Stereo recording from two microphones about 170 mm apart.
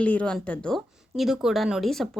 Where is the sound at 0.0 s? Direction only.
10° left (ahead or behind).